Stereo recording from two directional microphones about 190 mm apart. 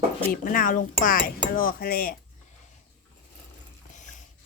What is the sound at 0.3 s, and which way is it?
Speech, 45° left (ahead or behind).